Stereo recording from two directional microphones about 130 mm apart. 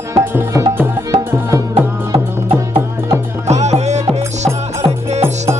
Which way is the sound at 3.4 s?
60° right (ahead or behind).